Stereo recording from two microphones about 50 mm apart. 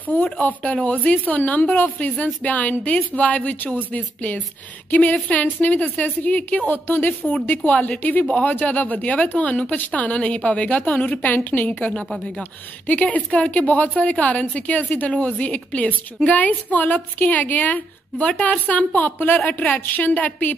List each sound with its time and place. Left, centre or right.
0.1 s a woman's voice: left
6.7 s a woman's voice: left
11.7 s a woman's voice: left
12.8 s a woman's voice: left
18.9 s a woman's voice: left